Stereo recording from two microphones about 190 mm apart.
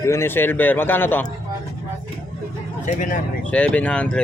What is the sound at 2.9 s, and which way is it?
Speech, 40° left (ahead or behind).